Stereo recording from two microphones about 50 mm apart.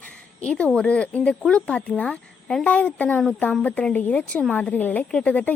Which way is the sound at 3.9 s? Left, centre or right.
Left.